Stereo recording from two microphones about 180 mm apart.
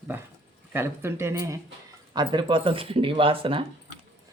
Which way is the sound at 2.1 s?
25° right (ahead or behind).